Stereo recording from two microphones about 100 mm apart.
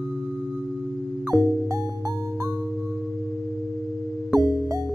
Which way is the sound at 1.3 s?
30° right (ahead or behind).